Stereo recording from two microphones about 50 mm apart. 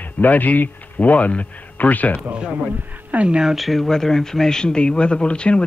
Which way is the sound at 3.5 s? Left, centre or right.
Centre.